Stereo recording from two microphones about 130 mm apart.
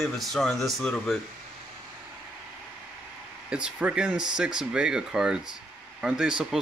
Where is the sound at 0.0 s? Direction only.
Centre (ahead or behind).